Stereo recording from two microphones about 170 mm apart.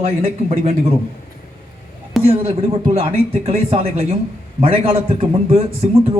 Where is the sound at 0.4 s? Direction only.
35° right (ahead or behind).